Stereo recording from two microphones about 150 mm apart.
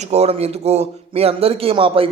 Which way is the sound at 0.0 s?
45° right (ahead or behind).